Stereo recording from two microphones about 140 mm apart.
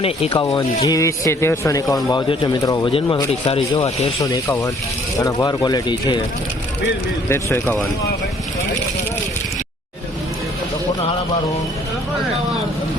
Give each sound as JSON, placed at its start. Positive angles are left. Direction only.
{"t": 0.0, "sound": "speech", "side_deg": 45}
{"t": 0.9, "sound": "speech", "side_deg": 20}
{"t": 2.0, "sound": "speech", "side_deg": 35}
{"t": 3.4, "sound": "speech", "side_deg": 40}
{"t": 5.2, "sound": "speech", "side_deg": 30}
{"t": 7.3, "sound": "speech", "side_deg": 20}